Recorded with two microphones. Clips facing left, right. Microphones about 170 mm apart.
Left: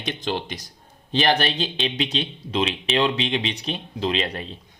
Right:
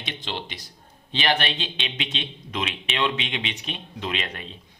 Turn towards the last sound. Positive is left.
turn(degrees=35)  # may be behind; listen again after turning